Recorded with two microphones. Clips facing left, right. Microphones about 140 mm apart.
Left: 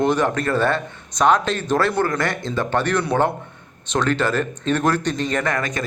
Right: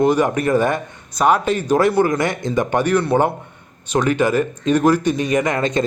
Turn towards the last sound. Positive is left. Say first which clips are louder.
# right 5 dB
turn(degrees=-25)  # may be behind; listen again after turning